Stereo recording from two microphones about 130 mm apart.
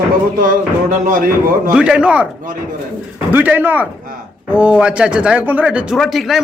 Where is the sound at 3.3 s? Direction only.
15° right (ahead or behind).